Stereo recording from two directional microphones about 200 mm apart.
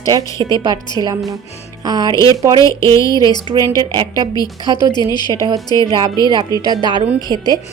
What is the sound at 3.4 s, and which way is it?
A woman's voice, 20° right (ahead or behind).